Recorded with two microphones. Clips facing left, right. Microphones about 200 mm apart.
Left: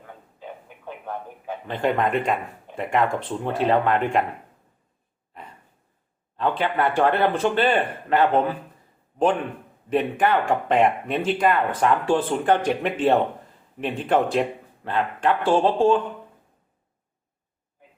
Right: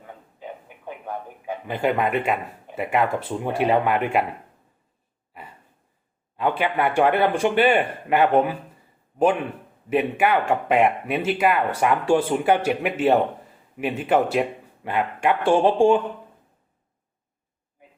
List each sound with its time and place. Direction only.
0.4 s a sound: 15° right (ahead or behind)
0.9 s a man's voice: 15° right (ahead or behind)
6.3 s a man's voice: 10° right (ahead or behind)
9.9 s a man's voice: 10° right (ahead or behind)